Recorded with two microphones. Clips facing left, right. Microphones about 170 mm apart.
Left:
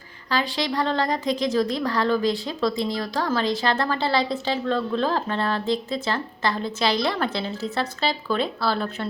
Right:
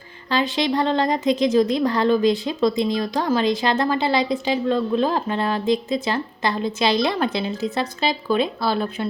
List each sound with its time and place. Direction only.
0.3 s a woman's voice: 20° right (ahead or behind)